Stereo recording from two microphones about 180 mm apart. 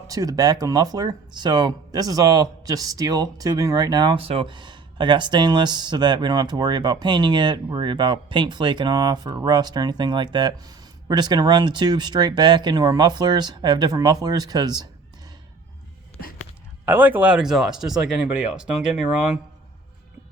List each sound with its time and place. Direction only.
0.1 s speech: 20° right (ahead or behind)
16.8 s speech: 10° right (ahead or behind)